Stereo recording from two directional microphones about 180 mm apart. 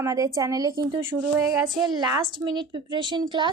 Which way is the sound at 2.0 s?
20° right (ahead or behind).